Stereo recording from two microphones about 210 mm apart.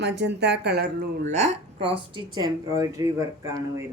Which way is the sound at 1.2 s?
30° right (ahead or behind).